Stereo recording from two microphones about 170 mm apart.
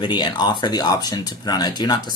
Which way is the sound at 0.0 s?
25° left (ahead or behind).